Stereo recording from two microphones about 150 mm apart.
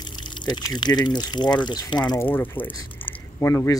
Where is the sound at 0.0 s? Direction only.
30° left (ahead or behind).